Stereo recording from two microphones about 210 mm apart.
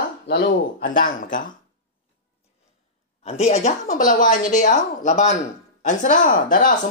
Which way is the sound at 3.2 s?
30° left (ahead or behind).